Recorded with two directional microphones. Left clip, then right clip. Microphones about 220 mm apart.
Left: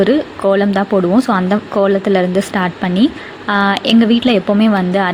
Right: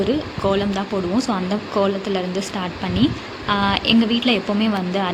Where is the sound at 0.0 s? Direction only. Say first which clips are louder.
Left 8 dB; 25° left (ahead or behind).